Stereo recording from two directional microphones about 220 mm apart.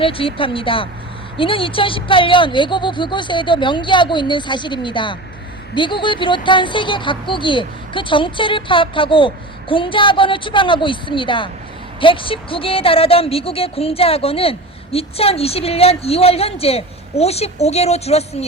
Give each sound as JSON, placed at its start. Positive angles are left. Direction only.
{"t": 0.0, "sound": "speech", "side_deg": 25}